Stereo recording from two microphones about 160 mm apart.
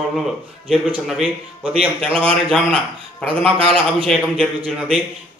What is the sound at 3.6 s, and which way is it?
Speech, 35° right (ahead or behind).